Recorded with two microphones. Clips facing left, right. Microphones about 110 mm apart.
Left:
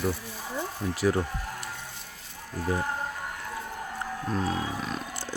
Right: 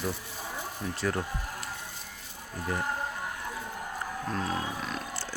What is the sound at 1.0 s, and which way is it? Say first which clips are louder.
Speech: left 6 dB; 10° left (ahead or behind).